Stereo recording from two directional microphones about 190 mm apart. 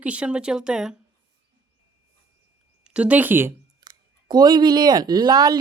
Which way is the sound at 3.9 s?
25° right (ahead or behind).